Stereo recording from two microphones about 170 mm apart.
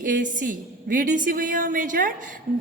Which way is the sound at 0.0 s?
50° right (ahead or behind).